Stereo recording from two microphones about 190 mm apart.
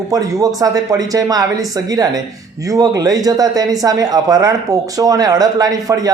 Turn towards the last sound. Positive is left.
turn(degrees=-20)  # may be behind; listen again after turning